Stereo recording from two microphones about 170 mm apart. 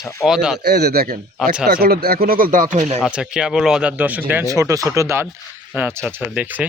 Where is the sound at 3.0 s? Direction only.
5° right (ahead or behind).